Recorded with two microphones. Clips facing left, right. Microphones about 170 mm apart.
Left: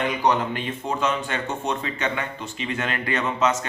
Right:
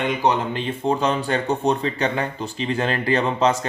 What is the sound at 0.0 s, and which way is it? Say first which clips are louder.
Speech: right 1 dB; 25° right (ahead or behind).